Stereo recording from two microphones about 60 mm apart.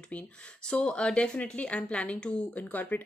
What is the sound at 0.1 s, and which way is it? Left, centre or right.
Speech, centre.